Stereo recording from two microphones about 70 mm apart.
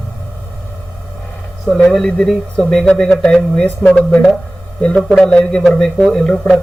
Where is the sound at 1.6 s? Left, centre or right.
Centre.